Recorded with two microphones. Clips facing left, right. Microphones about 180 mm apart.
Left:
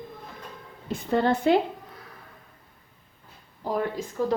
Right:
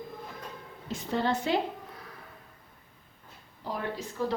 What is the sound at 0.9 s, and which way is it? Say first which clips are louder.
Speech: left 6 dB; 55° left (ahead or behind).